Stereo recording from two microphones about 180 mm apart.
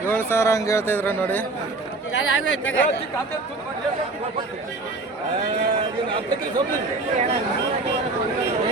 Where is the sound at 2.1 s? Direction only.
90° left.